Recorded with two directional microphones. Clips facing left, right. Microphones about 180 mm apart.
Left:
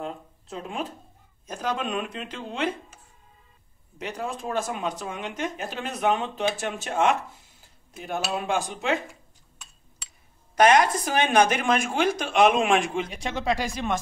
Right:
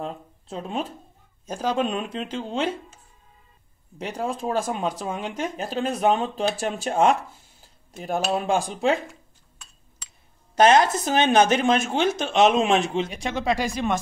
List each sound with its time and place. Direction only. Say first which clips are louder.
0.0 s speech: right 2 dB; 30° right (ahead or behind)
4.0 s speech: right 4 dB; 30° right (ahead or behind)
10.5 s speech: right 2 dB; 25° right (ahead or behind)
13.3 s speech: right 1 dB; 15° right (ahead or behind)